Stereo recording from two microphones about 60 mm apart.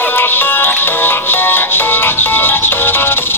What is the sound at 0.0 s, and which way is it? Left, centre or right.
Music, left.